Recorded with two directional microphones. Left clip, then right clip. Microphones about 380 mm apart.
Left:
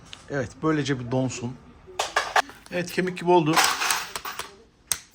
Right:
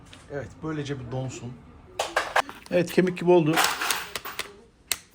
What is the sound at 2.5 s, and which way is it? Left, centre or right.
Speech, centre.